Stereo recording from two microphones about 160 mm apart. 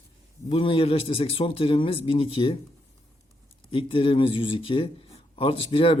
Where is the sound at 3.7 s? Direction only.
35° left (ahead or behind).